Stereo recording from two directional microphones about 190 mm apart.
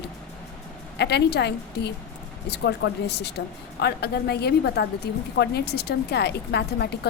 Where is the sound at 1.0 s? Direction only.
60° left (ahead or behind).